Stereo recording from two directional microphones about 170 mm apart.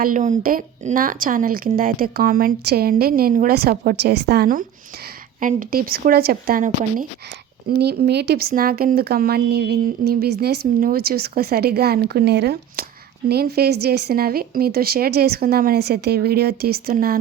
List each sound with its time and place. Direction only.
0.0 s speech: 50° right (ahead or behind)
5.4 s speech: 50° right (ahead or behind)
7.8 s speech: 70° right (ahead or behind)